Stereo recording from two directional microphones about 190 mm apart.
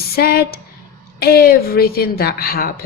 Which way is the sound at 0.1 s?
55° left (ahead or behind).